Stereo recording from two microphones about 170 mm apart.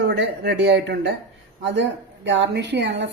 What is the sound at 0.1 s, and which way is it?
Speech, 80° right.